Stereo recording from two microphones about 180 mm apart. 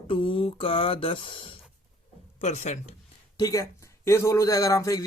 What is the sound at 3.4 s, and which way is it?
A man's voice, 20° left (ahead or behind).